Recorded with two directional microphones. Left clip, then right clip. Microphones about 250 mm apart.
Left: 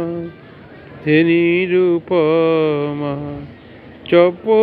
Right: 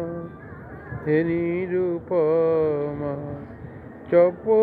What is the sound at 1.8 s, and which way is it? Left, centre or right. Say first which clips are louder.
Speech: left 7 dB; left.